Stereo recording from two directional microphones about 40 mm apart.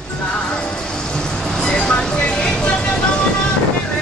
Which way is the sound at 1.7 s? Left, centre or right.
Left.